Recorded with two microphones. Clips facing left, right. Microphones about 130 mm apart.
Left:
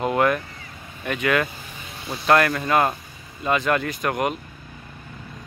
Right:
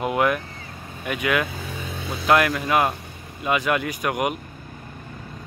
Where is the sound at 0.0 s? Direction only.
10° right (ahead or behind).